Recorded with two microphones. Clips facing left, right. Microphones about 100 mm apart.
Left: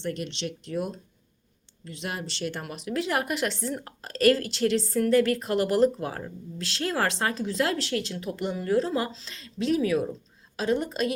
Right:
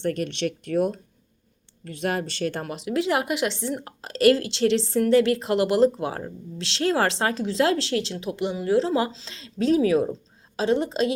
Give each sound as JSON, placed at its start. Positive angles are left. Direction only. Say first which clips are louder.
{"t": 0.0, "sound": "speech", "louder": "right 6 dB", "side_deg": -50}
{"t": 2.6, "sound": "a woman's voice", "louder": "right 5 dB", "side_deg": -25}
{"t": 8.3, "sound": "a woman's voice", "louder": "right 3 dB", "side_deg": -15}